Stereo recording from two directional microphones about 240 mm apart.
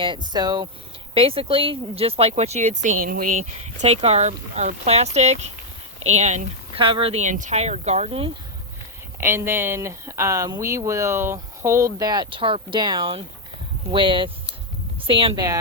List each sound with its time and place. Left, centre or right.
0.0 s speech: centre
9.2 s speech: centre